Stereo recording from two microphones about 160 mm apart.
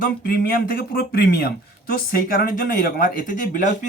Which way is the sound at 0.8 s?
75° left (ahead or behind).